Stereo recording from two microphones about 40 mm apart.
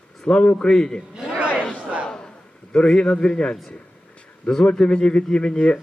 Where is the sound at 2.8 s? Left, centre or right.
Centre.